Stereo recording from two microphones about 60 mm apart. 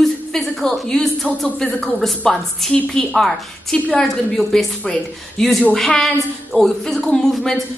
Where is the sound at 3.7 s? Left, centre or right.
Left.